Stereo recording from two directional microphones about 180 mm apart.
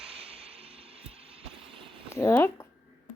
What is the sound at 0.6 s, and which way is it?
Music, 35° right (ahead or behind).